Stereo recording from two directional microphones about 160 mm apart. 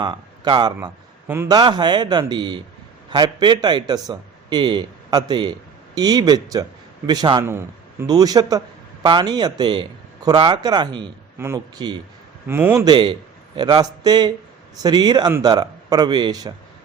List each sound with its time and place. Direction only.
0.0 s a man's voice: 25° right (ahead or behind)
11.3 s speech: 15° right (ahead or behind)
12.8 s a man's voice: 30° right (ahead or behind)